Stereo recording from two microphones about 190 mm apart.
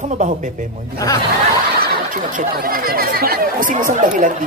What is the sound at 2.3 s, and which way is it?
Speech, 50° right (ahead or behind).